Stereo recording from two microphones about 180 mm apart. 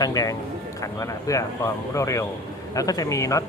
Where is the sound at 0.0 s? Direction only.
20° left (ahead or behind).